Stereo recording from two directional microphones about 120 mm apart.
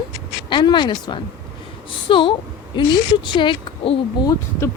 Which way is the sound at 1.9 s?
45° left (ahead or behind).